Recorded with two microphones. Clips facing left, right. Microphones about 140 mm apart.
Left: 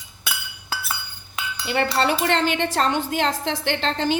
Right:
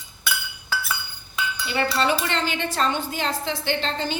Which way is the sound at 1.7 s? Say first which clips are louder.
Left 2 dB; 65° left (ahead or behind).